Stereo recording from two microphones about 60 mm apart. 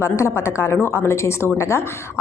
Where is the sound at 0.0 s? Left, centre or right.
Left.